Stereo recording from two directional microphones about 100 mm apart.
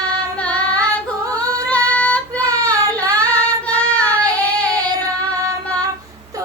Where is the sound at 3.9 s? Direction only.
10° left (ahead or behind).